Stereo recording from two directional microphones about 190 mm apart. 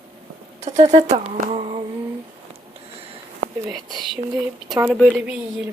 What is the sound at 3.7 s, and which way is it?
A woman's voice, 20° right (ahead or behind).